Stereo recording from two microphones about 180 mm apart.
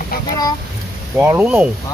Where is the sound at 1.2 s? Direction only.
10° right (ahead or behind).